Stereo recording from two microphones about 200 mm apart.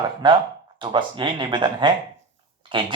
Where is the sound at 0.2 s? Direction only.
25° right (ahead or behind).